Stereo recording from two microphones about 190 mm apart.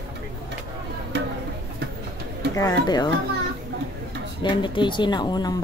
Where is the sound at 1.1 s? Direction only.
65° right (ahead or behind).